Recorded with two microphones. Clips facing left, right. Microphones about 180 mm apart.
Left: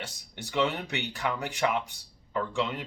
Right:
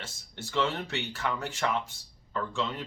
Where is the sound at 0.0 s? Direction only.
15° left (ahead or behind).